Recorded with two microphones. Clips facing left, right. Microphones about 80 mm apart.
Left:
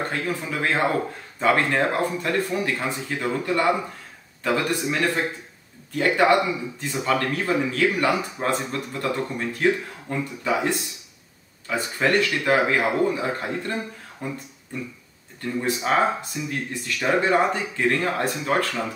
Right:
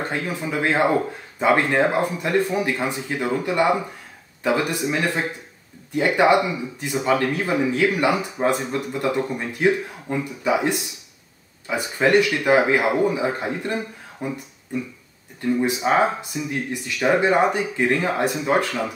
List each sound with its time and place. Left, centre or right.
0.1 s speech: centre